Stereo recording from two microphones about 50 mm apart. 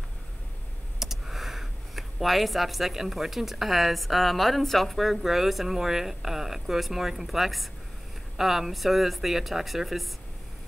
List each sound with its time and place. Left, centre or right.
0.9 s speech: centre